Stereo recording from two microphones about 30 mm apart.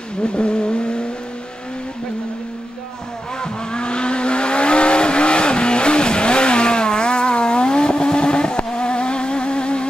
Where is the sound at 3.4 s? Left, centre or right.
Left.